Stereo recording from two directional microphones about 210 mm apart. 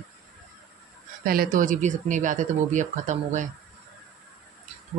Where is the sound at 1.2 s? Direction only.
45° right (ahead or behind).